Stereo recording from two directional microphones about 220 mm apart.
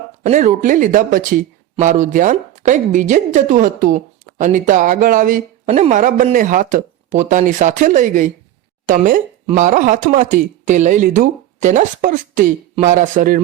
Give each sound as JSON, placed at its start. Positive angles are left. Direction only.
{"t": 0.2, "sound": "speech", "side_deg": -35}